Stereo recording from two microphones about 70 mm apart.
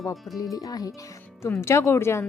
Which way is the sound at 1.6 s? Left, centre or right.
Left.